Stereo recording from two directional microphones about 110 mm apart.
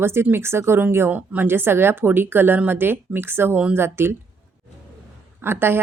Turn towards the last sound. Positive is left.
turn(degrees=-20)  # may be behind; listen again after turning